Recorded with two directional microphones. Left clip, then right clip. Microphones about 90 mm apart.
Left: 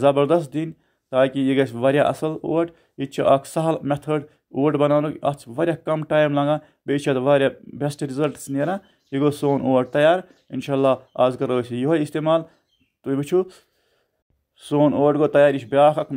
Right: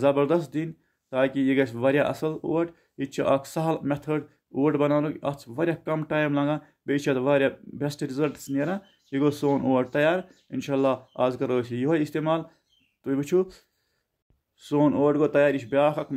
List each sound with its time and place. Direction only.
0.0 s speech: 30° left (ahead or behind)